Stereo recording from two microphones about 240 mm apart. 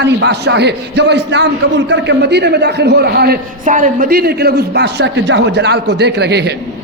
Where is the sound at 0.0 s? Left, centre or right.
Right.